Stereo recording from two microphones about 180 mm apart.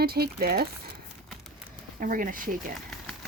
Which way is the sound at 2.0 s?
50° right (ahead or behind).